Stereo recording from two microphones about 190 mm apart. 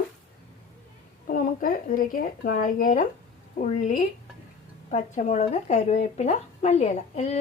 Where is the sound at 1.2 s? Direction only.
45° left (ahead or behind).